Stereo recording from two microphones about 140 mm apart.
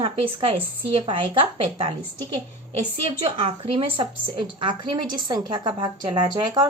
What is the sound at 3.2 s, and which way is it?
A woman's voice, 40° right (ahead or behind).